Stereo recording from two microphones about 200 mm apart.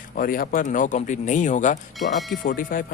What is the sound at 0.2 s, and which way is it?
Speech, 45° left (ahead or behind).